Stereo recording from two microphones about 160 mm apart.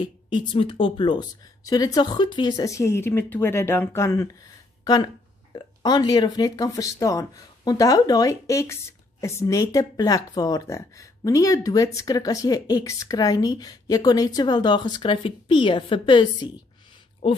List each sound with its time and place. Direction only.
0.0 s speech: 30° left (ahead or behind)